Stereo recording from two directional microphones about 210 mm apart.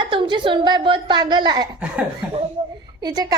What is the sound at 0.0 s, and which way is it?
A woman's voice, 25° right (ahead or behind).